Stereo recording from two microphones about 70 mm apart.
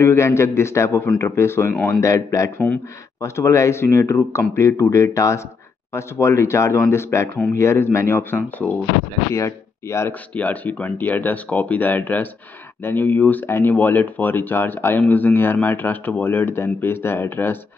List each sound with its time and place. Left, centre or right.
0.0 s a man's voice: left
2.0 s a man's voice: left
9.3 s speech: left
10.3 s speech: left